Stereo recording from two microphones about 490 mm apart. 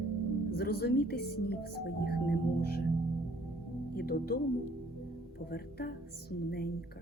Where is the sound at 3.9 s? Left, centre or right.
Centre.